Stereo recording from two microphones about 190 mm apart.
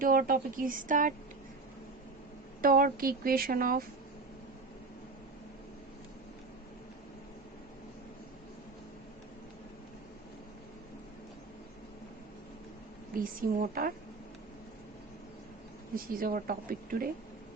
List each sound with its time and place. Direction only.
0.0 s speech: 50° right (ahead or behind)
2.6 s speech: 50° right (ahead or behind)
13.1 s speech: 45° right (ahead or behind)
16.1 s speech: 50° right (ahead or behind)